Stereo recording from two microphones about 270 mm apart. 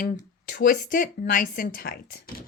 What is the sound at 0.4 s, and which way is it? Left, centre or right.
Speech, left.